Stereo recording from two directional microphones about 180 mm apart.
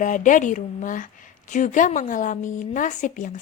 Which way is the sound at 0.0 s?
45° left (ahead or behind).